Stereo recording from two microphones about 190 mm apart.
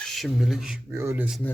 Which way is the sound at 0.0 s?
Centre (ahead or behind).